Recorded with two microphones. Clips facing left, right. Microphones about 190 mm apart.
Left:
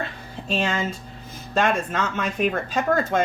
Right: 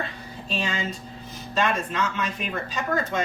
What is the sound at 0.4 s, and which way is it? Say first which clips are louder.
Speech: left 4 dB; 50° left (ahead or behind).